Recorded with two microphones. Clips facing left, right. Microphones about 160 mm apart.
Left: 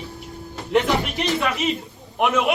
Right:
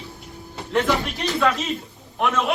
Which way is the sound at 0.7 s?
15° left (ahead or behind).